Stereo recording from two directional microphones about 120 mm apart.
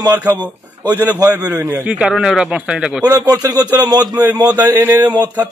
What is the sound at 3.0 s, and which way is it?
Speech, 30° right (ahead or behind).